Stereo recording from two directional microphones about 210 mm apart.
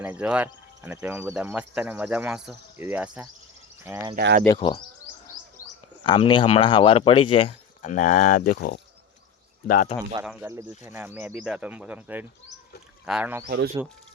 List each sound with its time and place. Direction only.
0.0 s speech: 5° right (ahead or behind)
4.1 s speech: 50° right (ahead or behind)
4.4 s speech: 25° left (ahead or behind)
6.0 s speech: 25° left (ahead or behind); by 10.0 s 40° left (ahead or behind)
10.2 s speech: 10° right (ahead or behind)